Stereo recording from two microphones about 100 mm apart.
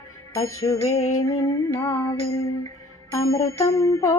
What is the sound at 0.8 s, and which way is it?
Music, 90° left.